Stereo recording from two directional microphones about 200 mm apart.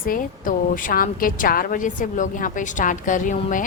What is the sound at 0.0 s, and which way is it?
A woman's voice, 45° left (ahead or behind).